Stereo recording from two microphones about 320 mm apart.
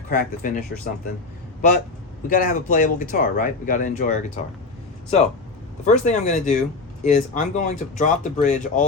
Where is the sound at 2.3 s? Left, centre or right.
Left.